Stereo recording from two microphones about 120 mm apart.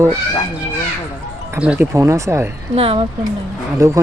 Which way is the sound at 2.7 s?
50° right (ahead or behind).